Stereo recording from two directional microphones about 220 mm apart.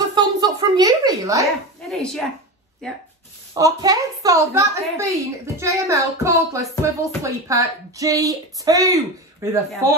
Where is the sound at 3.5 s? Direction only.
15° right (ahead or behind).